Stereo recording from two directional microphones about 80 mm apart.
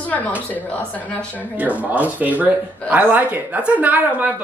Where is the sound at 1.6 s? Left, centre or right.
Centre.